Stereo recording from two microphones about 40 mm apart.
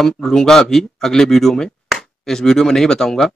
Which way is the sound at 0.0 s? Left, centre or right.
Centre.